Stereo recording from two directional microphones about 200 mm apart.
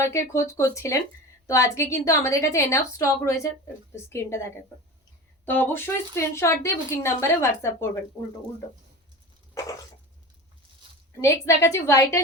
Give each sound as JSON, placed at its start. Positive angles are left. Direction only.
{"t": 0.0, "sound": "speech", "side_deg": 15}
{"t": 11.2, "sound": "speech", "side_deg": 15}